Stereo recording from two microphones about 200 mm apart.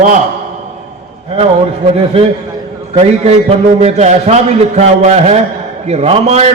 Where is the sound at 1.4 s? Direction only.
30° right (ahead or behind).